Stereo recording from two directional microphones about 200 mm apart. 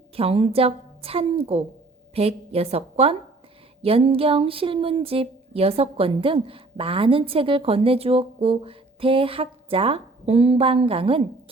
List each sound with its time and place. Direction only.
0.2 s a woman's voice: 30° right (ahead or behind)